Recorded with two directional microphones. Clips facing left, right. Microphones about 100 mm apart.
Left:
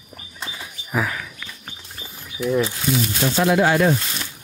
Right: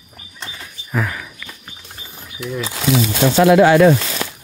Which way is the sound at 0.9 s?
5° left (ahead or behind).